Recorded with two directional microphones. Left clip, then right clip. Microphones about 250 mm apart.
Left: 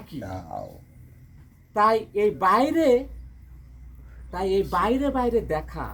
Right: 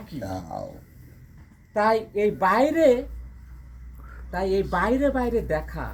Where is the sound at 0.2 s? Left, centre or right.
Right.